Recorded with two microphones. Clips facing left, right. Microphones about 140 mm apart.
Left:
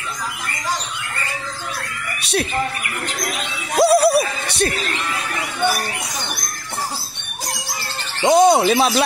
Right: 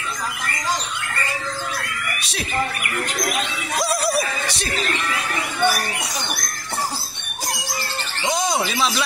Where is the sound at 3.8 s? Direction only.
60° left (ahead or behind).